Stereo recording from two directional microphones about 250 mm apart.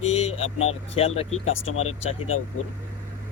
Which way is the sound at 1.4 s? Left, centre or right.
Left.